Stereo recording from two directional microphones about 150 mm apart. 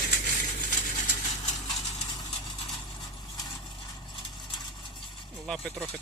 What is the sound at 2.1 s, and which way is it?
Vehicle, 30° left (ahead or behind).